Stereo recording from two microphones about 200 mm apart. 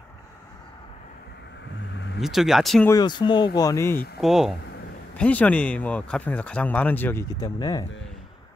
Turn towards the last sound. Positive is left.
turn(degrees=20)  # may be behind; listen again after turning